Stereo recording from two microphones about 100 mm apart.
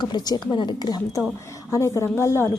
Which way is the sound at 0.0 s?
45° left (ahead or behind).